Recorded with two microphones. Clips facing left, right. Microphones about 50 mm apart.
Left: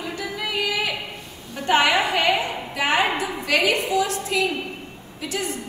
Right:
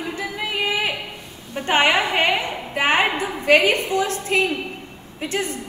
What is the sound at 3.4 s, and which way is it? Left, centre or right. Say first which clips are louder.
A woman's voice: right 5 dB; right.